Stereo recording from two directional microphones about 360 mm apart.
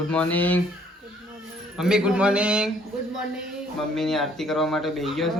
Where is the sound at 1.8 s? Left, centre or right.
Centre.